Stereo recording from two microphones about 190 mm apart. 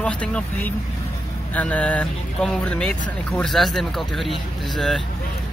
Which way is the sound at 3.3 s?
Centre (ahead or behind).